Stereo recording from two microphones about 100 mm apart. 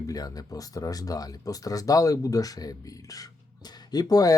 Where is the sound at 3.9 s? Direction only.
40° left (ahead or behind).